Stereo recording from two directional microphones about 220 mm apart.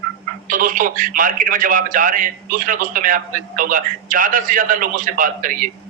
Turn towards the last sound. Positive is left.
turn(degrees=-40)  # may be behind; listen again after turning